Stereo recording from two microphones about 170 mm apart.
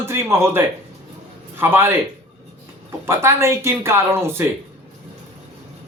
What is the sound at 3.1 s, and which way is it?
Speech, 15° right (ahead or behind).